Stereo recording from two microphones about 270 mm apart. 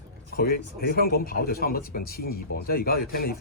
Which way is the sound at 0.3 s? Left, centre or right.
Left.